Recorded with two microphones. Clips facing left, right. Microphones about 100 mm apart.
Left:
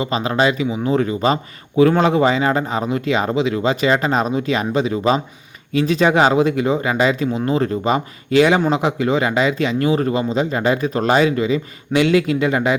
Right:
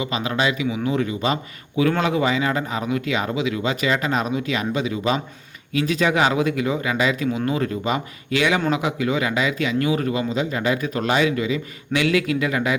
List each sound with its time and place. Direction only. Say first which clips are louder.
0.0 s a man's voice: left 5 dB; 35° left (ahead or behind)